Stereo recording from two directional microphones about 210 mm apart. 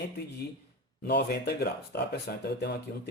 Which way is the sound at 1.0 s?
50° left (ahead or behind).